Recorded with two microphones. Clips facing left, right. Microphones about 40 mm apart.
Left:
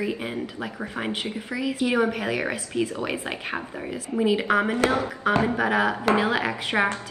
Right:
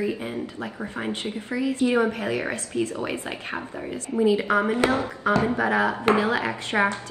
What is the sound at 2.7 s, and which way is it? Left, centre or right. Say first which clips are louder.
Speech: even; left.